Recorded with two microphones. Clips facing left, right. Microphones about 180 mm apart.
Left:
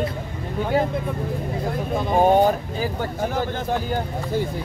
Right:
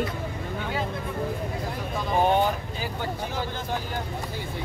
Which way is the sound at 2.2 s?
45° left (ahead or behind).